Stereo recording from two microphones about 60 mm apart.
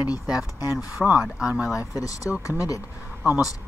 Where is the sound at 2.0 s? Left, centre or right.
Left.